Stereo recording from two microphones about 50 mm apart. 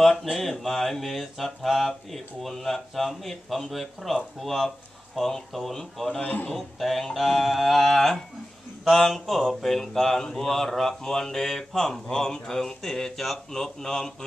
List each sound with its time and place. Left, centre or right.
0.0 s music: centre
6.2 s a man's voice: left
6.5 s music: centre
10.2 s speech: centre